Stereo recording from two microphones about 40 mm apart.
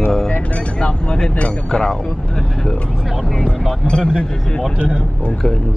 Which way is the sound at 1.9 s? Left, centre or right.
Centre.